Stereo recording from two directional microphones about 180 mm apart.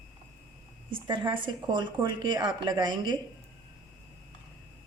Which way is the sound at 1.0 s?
25° right (ahead or behind).